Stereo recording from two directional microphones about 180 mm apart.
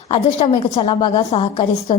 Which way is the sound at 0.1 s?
30° left (ahead or behind).